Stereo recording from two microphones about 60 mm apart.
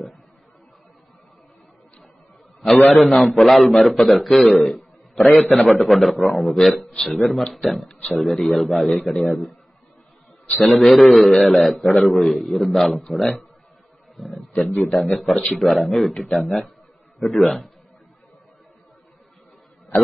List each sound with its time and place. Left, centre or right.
2.6 s a man's voice: centre
7.8 s speech: left
8.2 s a man's voice: centre
10.6 s a man's voice: centre
14.3 s a man's voice: centre